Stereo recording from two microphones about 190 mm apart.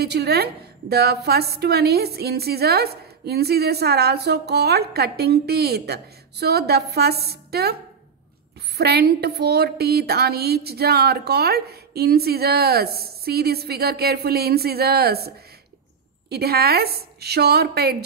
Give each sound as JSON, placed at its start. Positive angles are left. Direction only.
{"t": 0.0, "sound": "a woman's voice", "side_deg": -60}
{"t": 8.7, "sound": "a woman's voice", "side_deg": -55}